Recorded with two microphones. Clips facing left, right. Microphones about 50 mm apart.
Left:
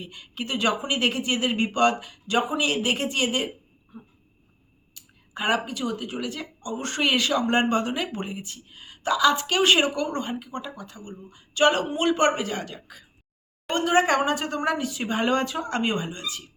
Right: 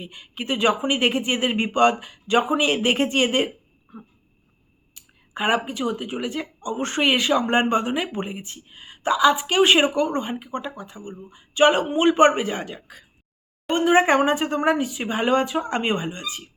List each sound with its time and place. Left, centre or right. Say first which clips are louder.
0.0 s speech: right 1 dB; right
4.9 s speech: right 4 dB; right